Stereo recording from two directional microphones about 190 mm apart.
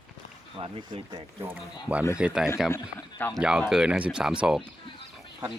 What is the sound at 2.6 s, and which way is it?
Speech, 10° left (ahead or behind).